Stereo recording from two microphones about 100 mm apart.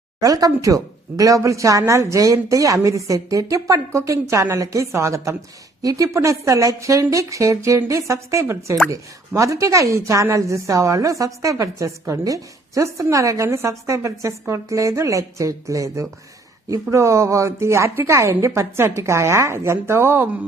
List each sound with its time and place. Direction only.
0.2 s a woman's voice: 40° right (ahead or behind); by 20.3 s 20° right (ahead or behind)